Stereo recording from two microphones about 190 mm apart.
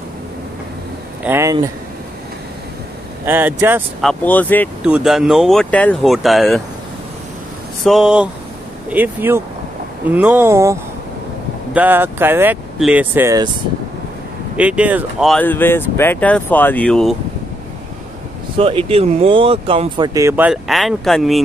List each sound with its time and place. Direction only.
1.2 s speech: 15° right (ahead or behind)
3.3 s speech: 10° right (ahead or behind)
4.0 s speech: 5° left (ahead or behind)
4.8 s speech: 5° right (ahead or behind)
7.8 s speech: centre (ahead or behind)
14.6 s speech: 5° right (ahead or behind)
15.4 s speech: 10° left (ahead or behind)
18.6 s speech: 30° right (ahead or behind)
20.2 s speech: 10° right (ahead or behind)